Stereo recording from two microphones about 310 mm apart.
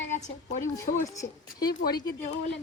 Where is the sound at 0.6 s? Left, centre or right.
Centre.